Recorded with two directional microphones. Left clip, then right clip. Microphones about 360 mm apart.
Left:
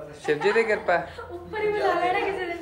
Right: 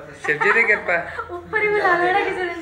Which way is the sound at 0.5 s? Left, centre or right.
Centre.